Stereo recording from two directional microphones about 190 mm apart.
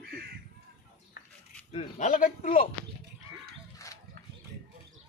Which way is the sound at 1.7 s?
30° left (ahead or behind).